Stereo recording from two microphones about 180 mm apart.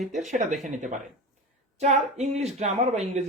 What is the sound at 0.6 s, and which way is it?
Speech, 45° right (ahead or behind).